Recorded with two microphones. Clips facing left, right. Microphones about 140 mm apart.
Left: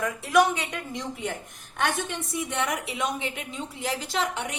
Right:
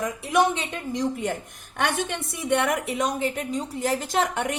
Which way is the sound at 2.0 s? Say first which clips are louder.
Right 5 dB; 60° right (ahead or behind).